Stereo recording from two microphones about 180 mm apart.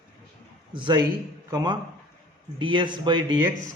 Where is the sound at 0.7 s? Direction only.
25° right (ahead or behind).